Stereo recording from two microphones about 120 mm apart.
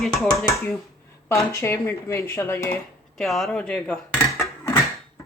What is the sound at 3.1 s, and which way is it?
Speech, centre (ahead or behind).